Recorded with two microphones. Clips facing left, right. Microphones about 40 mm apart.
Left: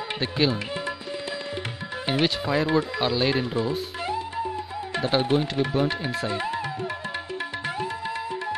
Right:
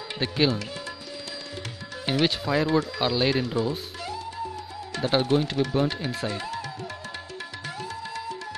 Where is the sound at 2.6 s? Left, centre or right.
Centre.